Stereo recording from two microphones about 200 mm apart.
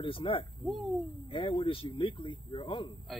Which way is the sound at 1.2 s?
25° left (ahead or behind).